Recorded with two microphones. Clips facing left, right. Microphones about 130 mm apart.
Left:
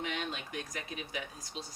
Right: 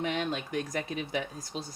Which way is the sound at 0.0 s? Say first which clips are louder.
Right 7 dB; 40° right (ahead or behind).